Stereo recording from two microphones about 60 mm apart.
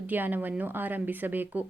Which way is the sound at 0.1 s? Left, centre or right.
Right.